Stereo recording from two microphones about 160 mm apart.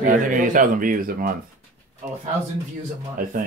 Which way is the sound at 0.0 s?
55° right (ahead or behind).